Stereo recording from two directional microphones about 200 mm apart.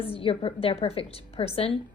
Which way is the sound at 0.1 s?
25° left (ahead or behind).